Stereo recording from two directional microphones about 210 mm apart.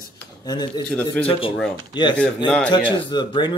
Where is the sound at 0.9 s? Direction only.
5° left (ahead or behind).